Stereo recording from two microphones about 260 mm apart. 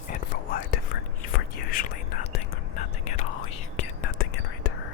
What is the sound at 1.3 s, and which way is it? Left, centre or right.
Whispering, left.